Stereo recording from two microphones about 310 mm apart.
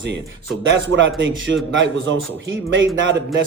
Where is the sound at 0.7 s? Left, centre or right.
Right.